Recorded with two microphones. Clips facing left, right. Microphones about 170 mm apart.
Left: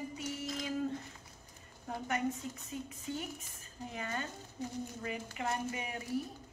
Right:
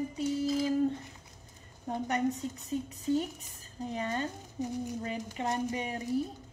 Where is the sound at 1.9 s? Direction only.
35° right (ahead or behind).